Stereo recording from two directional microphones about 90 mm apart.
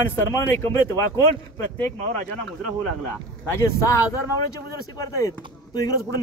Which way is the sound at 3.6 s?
35° left (ahead or behind).